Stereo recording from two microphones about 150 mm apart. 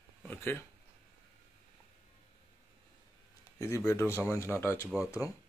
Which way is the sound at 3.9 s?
15° left (ahead or behind).